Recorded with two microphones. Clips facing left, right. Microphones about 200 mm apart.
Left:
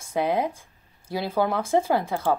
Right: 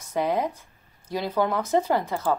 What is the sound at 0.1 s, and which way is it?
Speech, 10° left (ahead or behind).